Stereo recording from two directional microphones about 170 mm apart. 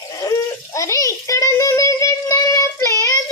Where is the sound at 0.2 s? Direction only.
20° left (ahead or behind).